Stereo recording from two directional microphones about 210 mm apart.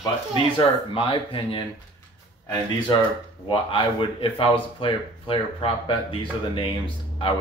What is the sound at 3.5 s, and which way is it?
Speech, 25° left (ahead or behind).